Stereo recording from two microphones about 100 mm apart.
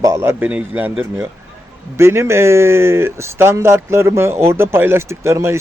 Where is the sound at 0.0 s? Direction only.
30° right (ahead or behind).